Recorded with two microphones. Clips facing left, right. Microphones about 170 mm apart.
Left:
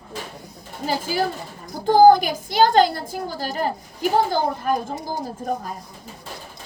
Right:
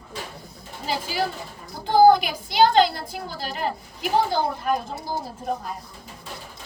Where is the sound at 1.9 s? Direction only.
45° left (ahead or behind).